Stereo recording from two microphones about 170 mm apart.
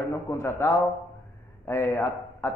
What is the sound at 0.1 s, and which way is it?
A man's voice, 15° left (ahead or behind).